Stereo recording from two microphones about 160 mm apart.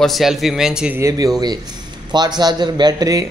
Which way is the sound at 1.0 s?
20° right (ahead or behind).